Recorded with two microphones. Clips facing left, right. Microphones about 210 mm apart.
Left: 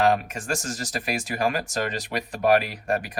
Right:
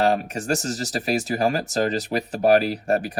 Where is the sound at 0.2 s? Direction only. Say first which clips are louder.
Right 5 dB; 40° right (ahead or behind).